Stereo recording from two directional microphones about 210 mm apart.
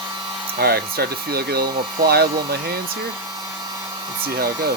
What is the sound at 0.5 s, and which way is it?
Speech, 45° right (ahead or behind).